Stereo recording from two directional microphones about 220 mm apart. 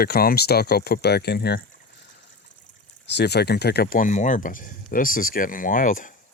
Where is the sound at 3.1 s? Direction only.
50° left (ahead or behind).